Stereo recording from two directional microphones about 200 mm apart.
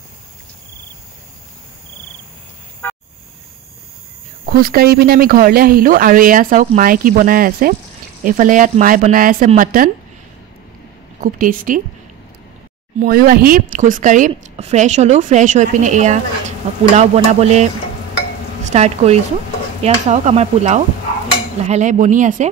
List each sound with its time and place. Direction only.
2.8 s a sound: 10° left (ahead or behind)
4.5 s a woman's voice: 50° right (ahead or behind)
11.3 s a woman's voice: 40° right (ahead or behind)
13.0 s a woman's voice: 45° right (ahead or behind)
18.7 s a woman's voice: 35° right (ahead or behind)